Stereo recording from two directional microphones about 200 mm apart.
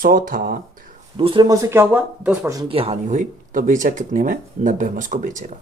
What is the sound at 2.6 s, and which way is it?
Speech, 30° right (ahead or behind).